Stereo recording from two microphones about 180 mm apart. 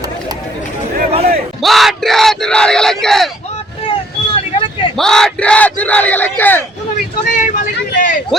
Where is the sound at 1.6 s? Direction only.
Centre (ahead or behind).